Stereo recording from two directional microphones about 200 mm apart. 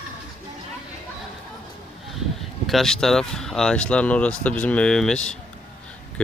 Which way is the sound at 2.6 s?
Centre (ahead or behind).